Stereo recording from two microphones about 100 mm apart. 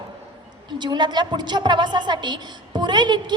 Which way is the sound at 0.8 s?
50° right (ahead or behind).